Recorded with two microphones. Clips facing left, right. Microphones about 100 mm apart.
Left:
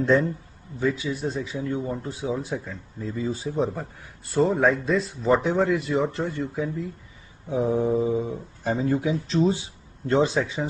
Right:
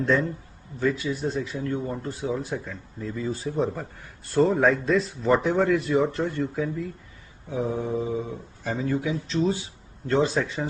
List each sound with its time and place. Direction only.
0.7 s a man's voice: 10° left (ahead or behind)
7.4 s speech: 30° left (ahead or behind)
10.3 s speech: 5° left (ahead or behind)